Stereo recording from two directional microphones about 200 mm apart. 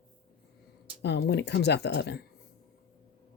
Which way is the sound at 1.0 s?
60° left (ahead or behind).